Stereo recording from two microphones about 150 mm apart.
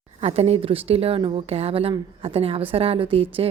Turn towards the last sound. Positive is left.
turn(degrees=-40)  # may be behind; listen again after turning